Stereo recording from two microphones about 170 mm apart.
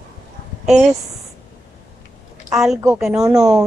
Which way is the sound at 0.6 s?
Centre (ahead or behind).